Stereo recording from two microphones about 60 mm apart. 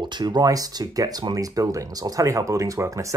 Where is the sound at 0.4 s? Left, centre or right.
Right.